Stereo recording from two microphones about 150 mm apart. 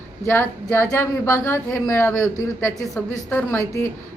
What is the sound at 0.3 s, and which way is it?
Speech, 15° left (ahead or behind).